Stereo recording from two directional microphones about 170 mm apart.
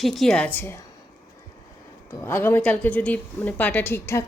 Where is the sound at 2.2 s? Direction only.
15° left (ahead or behind).